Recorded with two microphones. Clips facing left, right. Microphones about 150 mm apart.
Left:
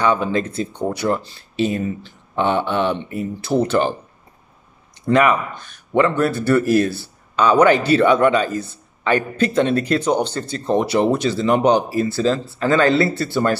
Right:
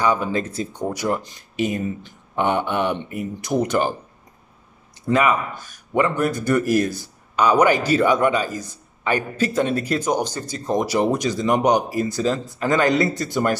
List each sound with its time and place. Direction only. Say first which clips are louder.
0.0 s a man's voice: left 2 dB; 10° right (ahead or behind)
5.5 s a man's voice: left 3 dB; 10° right (ahead or behind)